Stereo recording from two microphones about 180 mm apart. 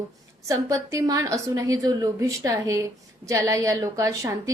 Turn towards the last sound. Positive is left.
turn(degrees=-20)  # may be behind; listen again after turning